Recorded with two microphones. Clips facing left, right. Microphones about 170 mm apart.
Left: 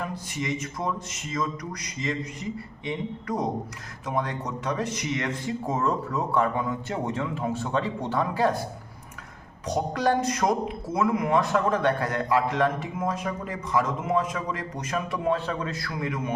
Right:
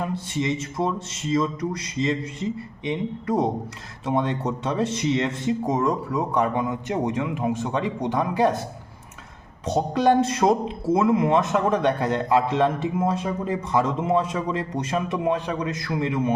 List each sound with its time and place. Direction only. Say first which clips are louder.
0.0 s a man's voice: right 5 dB; 25° right (ahead or behind)
9.6 s a man's voice: right 5 dB; 25° right (ahead or behind)